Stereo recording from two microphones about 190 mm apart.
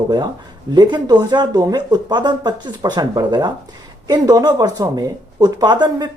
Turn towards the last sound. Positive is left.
turn(degrees=-25)  # may be behind; listen again after turning